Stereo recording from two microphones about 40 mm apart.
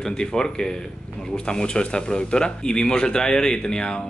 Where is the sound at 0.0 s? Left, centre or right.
Centre.